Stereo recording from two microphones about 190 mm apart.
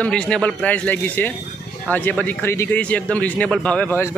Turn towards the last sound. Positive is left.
turn(degrees=10)  # may be behind; listen again after turning